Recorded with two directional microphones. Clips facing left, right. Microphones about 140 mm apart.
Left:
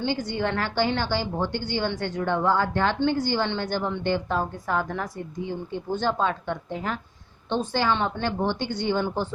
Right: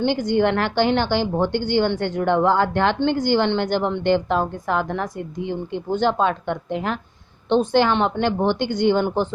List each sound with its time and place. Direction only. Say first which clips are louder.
0.3 s a woman's voice: right 8 dB; 65° right (ahead or behind)